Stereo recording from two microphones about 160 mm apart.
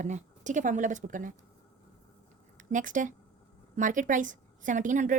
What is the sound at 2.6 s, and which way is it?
A woman's voice, 55° right (ahead or behind).